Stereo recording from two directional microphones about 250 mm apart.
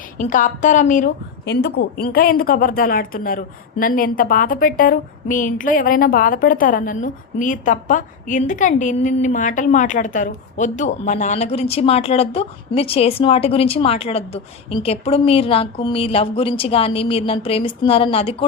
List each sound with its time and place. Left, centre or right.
0.2 s a woman's voice: left